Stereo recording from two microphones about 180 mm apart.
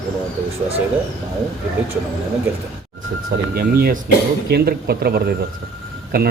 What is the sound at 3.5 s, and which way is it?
Speech, 55° right (ahead or behind).